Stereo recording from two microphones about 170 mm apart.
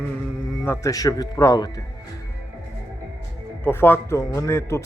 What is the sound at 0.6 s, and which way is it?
Speech, 15° left (ahead or behind).